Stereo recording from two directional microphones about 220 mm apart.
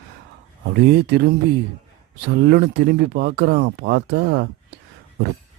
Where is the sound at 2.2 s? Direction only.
50° right (ahead or behind).